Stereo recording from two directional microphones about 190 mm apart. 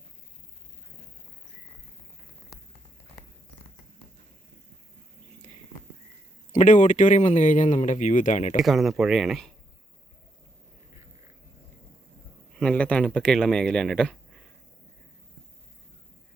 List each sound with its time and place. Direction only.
6.5 s speech: 40° left (ahead or behind)
8.6 s speech: centre (ahead or behind)
12.5 s speech: 5° left (ahead or behind)